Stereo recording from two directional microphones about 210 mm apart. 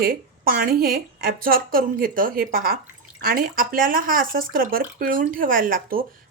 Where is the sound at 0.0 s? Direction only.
45° right (ahead or behind).